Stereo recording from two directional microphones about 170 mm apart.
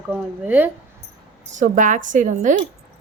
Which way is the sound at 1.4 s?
50° right (ahead or behind).